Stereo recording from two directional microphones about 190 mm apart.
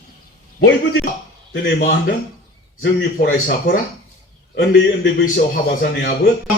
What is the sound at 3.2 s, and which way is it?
Speech, 50° left (ahead or behind).